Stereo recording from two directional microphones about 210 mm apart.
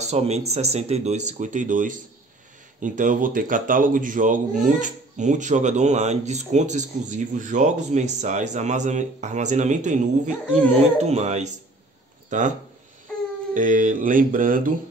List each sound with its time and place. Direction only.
0.0 s speech: 30° right (ahead or behind)